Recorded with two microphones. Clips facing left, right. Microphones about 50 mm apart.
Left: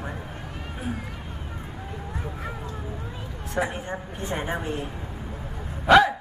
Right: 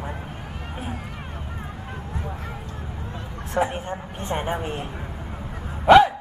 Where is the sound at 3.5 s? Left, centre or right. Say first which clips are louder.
Right 3 dB; right.